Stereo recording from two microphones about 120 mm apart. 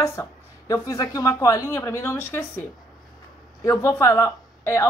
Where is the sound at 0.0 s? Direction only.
25° left (ahead or behind).